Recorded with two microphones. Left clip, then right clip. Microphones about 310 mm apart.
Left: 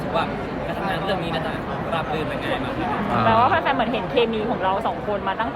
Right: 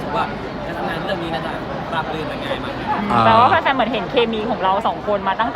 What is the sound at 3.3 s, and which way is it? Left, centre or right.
Speech, right.